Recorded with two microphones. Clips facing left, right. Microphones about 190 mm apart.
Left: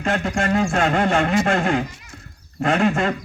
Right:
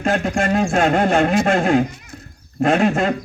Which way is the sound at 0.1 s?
40° right (ahead or behind).